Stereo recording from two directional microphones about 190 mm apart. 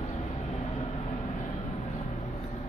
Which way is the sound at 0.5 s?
30° left (ahead or behind).